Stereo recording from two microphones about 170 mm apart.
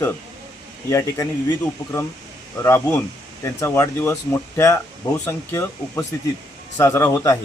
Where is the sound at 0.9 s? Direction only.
15° left (ahead or behind).